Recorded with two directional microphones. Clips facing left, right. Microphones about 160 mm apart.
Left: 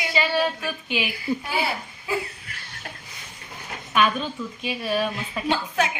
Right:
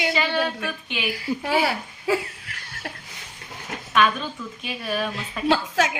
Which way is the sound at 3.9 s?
5° left (ahead or behind).